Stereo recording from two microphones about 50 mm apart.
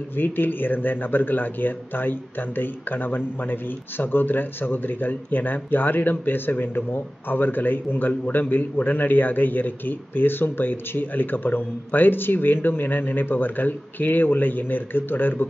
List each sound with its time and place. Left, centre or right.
0.2 s a man's voice: left